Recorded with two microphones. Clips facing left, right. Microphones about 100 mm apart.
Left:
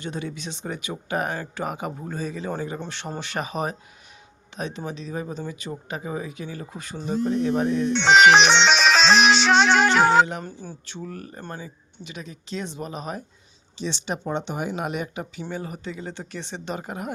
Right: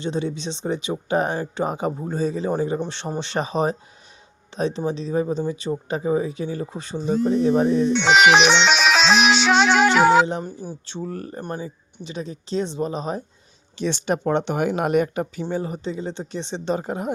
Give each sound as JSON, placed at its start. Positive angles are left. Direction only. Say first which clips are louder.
{"t": 0.0, "sound": "speech", "louder": "right 6 dB", "side_deg": -25}
{"t": 7.9, "sound": "music", "louder": "left 2 dB", "side_deg": 0}
{"t": 10.4, "sound": "speech", "louder": "right 4 dB", "side_deg": -15}
{"t": 10.8, "sound": "speech", "louder": "right 6 dB", "side_deg": -30}
{"t": 13.7, "sound": "speech", "louder": "right 6 dB", "side_deg": -50}
{"t": 15.4, "sound": "speech", "louder": "right 6 dB", "side_deg": -30}